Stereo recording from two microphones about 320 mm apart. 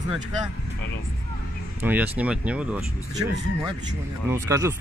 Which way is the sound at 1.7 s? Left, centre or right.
Centre.